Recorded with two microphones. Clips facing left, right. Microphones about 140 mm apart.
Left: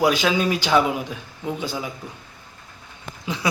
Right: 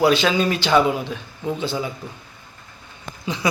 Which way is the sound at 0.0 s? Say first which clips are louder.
Right 2 dB; 10° left (ahead or behind).